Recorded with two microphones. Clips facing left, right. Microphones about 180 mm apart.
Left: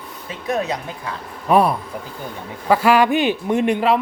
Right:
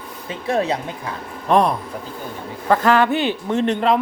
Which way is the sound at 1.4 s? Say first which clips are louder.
Left 1 dB; 5° left (ahead or behind).